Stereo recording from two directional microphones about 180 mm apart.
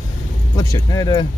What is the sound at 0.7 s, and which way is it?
Speech, 20° left (ahead or behind).